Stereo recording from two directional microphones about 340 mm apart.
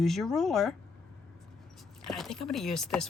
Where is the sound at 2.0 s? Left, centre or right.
Centre.